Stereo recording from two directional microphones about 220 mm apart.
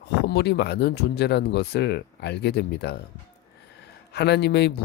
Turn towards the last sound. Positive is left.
turn(degrees=50)  # may be behind; listen again after turning